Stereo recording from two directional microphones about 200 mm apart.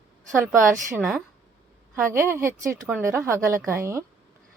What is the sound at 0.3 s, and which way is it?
Speech, 15° right (ahead or behind).